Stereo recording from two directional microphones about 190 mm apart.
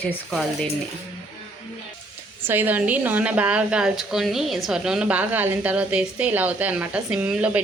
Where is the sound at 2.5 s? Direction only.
10° right (ahead or behind).